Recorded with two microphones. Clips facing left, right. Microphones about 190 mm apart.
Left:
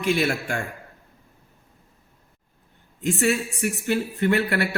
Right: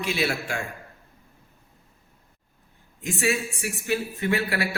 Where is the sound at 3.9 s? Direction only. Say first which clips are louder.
Left 3 dB; 60° left (ahead or behind).